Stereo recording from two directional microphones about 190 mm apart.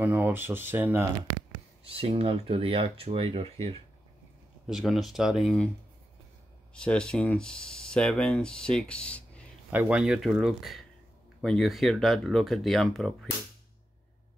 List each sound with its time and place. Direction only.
0.0 s speech: 10° right (ahead or behind)
1.9 s speech: 30° right (ahead or behind)
4.6 s speech: centre (ahead or behind)
6.7 s speech: 5° left (ahead or behind)
9.7 s speech: 5° right (ahead or behind)